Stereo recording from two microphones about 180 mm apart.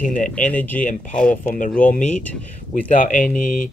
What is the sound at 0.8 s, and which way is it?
Speech, 45° left (ahead or behind).